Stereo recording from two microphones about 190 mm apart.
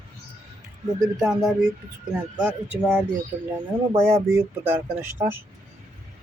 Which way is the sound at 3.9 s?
15° right (ahead or behind).